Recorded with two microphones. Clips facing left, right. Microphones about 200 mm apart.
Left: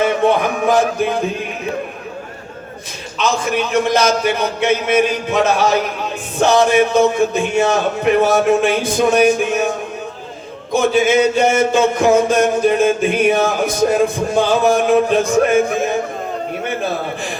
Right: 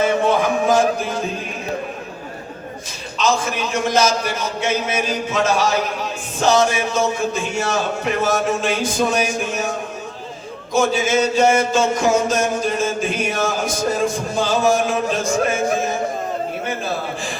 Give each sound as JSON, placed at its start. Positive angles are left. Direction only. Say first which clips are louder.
{"t": 0.3, "sound": "a sound", "louder": "left 1 dB", "side_deg": 60}
{"t": 3.2, "sound": "music", "louder": "left 2 dB", "side_deg": 60}
{"t": 10.7, "sound": "music", "louder": "left 4 dB", "side_deg": 60}